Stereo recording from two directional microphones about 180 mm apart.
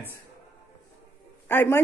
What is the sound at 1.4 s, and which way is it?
Speech, 10° left (ahead or behind).